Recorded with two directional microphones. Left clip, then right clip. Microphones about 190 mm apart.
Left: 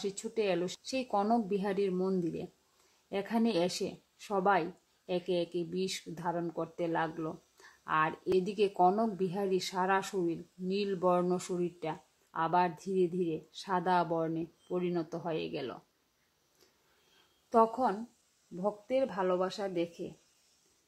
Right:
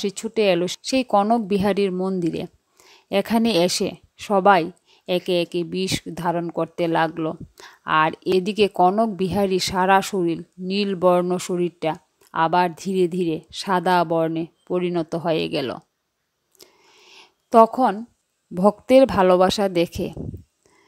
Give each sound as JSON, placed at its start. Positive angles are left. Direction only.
{"t": 0.0, "sound": "a woman's voice", "side_deg": -40}
{"t": 17.5, "sound": "a woman's voice", "side_deg": -45}